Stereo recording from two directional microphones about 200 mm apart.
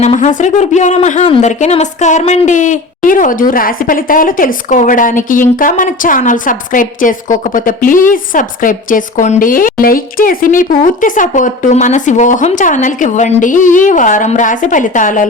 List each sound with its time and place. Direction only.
0.0 s speech: 35° left (ahead or behind)